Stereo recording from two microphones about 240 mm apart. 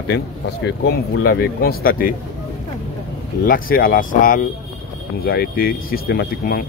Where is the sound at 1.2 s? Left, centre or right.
Left.